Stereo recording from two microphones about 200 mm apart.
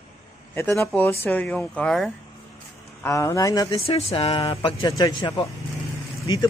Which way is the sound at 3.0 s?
15° left (ahead or behind).